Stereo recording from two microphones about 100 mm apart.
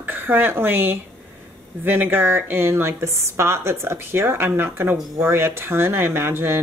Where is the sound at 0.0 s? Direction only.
20° right (ahead or behind).